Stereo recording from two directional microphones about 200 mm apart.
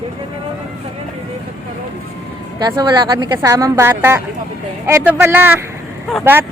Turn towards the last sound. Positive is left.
turn(degrees=-10)  # may be behind; listen again after turning